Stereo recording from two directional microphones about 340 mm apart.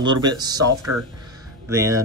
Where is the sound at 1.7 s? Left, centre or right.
Centre.